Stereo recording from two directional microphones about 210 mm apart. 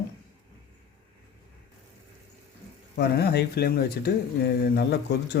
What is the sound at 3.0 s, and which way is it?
Speech, 50° left (ahead or behind).